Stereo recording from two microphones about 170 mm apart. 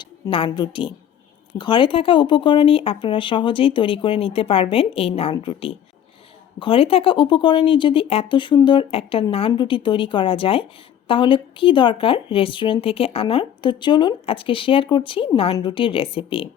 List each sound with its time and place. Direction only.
0.0 s a woman's voice: 30° left (ahead or behind)